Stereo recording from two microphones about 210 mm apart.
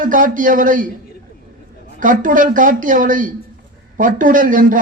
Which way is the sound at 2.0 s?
40° right (ahead or behind).